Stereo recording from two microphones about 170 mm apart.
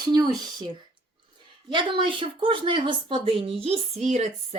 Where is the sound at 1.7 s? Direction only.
30° right (ahead or behind).